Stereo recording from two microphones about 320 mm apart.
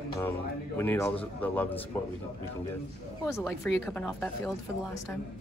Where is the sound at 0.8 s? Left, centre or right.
Centre.